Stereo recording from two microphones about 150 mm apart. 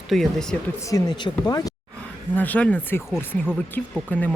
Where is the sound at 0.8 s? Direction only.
25° left (ahead or behind).